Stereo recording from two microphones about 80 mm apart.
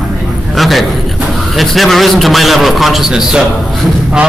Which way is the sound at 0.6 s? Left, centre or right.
Centre.